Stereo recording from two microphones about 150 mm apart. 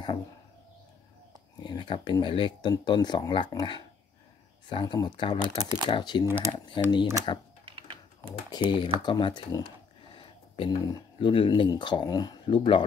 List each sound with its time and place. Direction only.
1.6 s speech: 30° left (ahead or behind)
6.2 s speech: 15° right (ahead or behind)
6.7 s speech: 30° left (ahead or behind)
7.6 s a sound: 35° right (ahead or behind)
8.3 s speech: 30° left (ahead or behind)